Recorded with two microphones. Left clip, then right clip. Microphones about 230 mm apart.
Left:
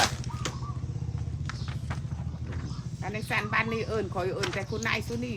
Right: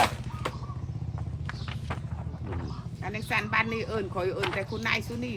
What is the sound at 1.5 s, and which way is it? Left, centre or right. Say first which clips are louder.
Vehicle: right 2 dB; right.